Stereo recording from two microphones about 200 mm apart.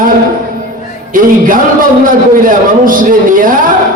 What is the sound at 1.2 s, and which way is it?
A man's voice, 45° right (ahead or behind).